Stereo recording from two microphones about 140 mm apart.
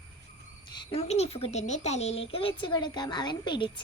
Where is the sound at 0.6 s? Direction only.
30° left (ahead or behind).